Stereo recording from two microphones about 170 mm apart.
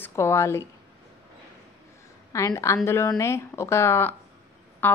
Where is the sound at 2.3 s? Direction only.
20° left (ahead or behind).